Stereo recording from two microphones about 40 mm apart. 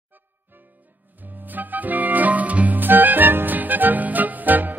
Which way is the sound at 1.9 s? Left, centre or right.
Right.